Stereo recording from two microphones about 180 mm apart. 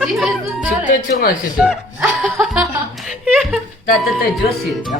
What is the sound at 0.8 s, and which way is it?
Music, 45° left (ahead or behind).